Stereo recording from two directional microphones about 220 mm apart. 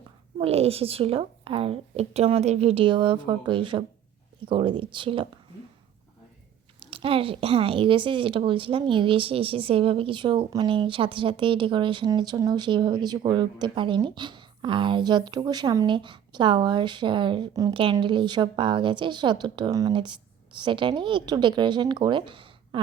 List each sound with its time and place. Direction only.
0.3 s speech: 25° right (ahead or behind)
6.7 s speech: 25° right (ahead or behind)